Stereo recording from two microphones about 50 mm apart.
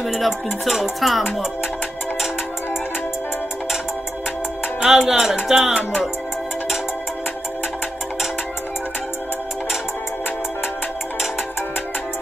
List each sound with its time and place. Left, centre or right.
0.0 s music: centre
4.7 s music: centre